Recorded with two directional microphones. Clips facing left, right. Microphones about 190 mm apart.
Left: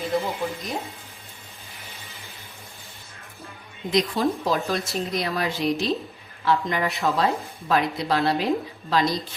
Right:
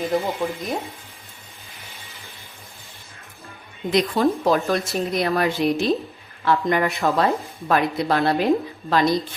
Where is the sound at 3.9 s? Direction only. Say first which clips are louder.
Right 3 dB; 60° right (ahead or behind).